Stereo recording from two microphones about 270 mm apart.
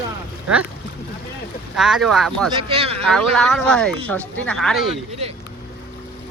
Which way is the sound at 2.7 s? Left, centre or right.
Right.